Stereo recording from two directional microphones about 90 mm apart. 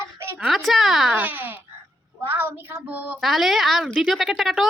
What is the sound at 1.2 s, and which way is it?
Babbling, 20° right (ahead or behind).